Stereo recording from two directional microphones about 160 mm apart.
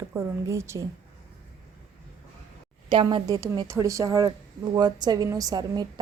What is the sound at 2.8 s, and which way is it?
A woman's voice, 30° right (ahead or behind).